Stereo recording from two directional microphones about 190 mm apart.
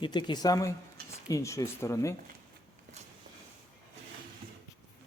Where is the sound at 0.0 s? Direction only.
25° left (ahead or behind).